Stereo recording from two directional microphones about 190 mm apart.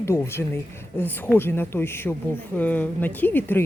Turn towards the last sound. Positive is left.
turn(degrees=10)  # may be behind; listen again after turning